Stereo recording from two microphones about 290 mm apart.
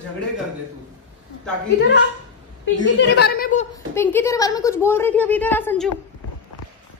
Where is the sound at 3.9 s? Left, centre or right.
Centre.